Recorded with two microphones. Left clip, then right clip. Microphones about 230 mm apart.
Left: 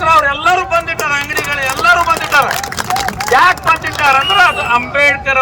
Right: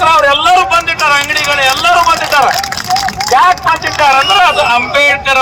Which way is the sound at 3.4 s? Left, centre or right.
Right.